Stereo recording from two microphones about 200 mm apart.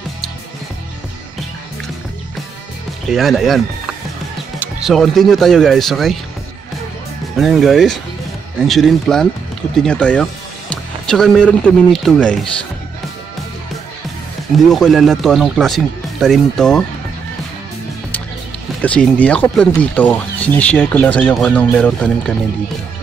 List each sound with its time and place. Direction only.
3.1 s speech: centre (ahead or behind)
7.3 s speech: centre (ahead or behind)
14.7 s speech: centre (ahead or behind)
18.8 s speech: 5° left (ahead or behind)